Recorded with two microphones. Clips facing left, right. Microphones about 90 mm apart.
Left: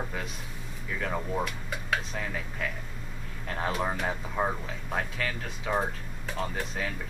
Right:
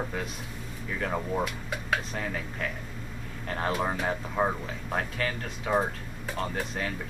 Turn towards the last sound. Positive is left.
turn(degrees=0)  # may be behind; listen again after turning